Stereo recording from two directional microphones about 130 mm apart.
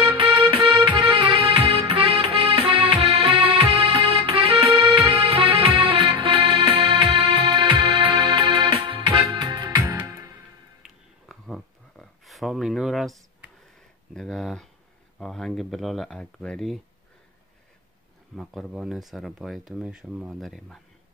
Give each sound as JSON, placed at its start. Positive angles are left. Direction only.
{"t": 0.0, "sound": "music", "side_deg": -40}
{"t": 11.2, "sound": "a sound", "side_deg": 0}
{"t": 15.1, "sound": "speech", "side_deg": 5}
{"t": 18.3, "sound": "speech", "side_deg": 0}